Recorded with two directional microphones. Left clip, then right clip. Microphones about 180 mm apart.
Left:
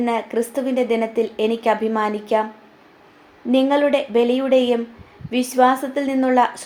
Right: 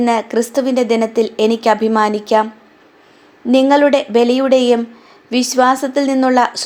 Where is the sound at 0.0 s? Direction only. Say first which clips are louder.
Right 6 dB; 35° right (ahead or behind).